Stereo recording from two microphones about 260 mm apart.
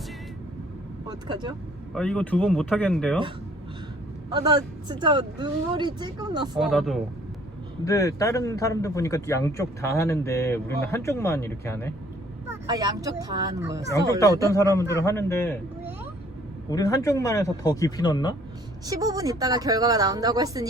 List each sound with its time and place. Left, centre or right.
1.0 s speech: centre
1.9 s speech: centre
4.4 s speech: centre
6.6 s speech: centre
7.9 s a man's voice: centre
12.5 s speech: centre
14.5 s a man's voice: centre
16.6 s a man's voice: centre
18.9 s speech: centre